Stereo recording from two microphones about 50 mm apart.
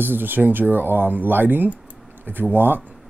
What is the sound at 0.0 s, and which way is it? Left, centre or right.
Speech, right.